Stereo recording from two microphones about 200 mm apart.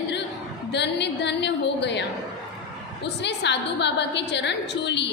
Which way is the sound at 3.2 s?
60° left (ahead or behind).